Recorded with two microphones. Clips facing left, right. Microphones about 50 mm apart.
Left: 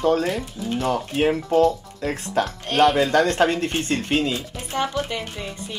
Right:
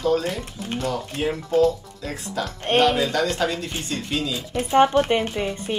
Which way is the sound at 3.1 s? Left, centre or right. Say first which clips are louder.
Left 5 dB; left.